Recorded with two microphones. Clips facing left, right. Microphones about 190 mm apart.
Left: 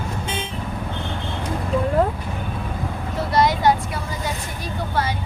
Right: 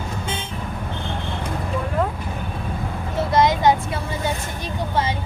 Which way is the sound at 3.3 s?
20° right (ahead or behind).